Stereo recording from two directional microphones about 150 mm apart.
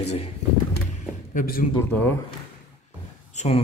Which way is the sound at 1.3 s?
70° left (ahead or behind).